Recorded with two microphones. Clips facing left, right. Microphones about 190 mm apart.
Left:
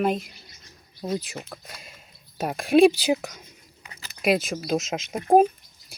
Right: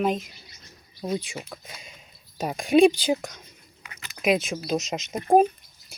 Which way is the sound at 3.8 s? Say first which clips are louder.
Even; 30° left (ahead or behind).